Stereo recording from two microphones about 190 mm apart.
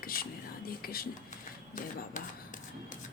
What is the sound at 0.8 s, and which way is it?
Speech, 50° left (ahead or behind).